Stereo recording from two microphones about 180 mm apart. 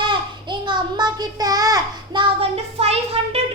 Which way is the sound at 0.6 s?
25° right (ahead or behind).